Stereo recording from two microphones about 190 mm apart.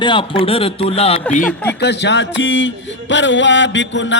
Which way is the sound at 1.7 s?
65° left (ahead or behind).